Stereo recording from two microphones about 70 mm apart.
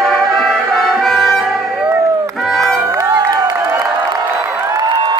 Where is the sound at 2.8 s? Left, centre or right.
Right.